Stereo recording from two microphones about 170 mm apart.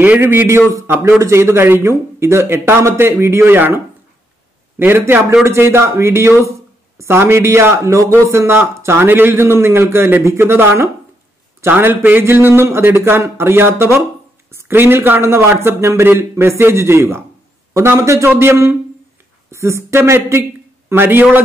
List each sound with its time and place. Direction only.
0.0 s a man's voice: 10° right (ahead or behind)